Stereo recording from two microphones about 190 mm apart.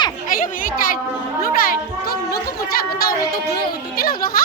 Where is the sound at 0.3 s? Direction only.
45° left (ahead or behind).